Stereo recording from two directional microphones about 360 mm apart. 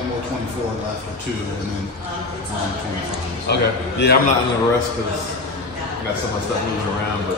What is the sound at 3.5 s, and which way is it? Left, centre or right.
Speech, left.